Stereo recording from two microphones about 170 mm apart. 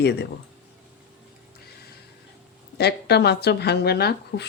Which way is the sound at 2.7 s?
75° left (ahead or behind).